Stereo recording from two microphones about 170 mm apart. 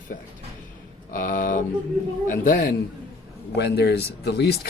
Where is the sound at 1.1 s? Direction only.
55° left (ahead or behind).